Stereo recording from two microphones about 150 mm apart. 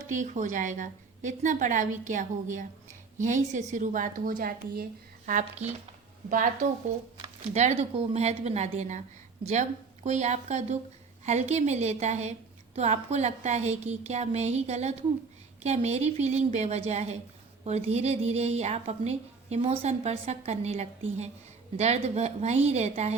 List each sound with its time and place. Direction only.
0.1 s a woman's voice: 55° right (ahead or behind)